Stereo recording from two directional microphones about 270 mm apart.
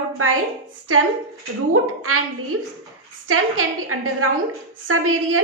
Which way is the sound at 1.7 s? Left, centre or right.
Right.